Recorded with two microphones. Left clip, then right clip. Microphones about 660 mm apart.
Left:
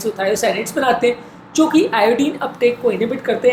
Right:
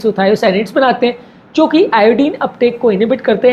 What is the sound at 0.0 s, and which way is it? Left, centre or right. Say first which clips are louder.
A woman's voice: right 6 dB; right.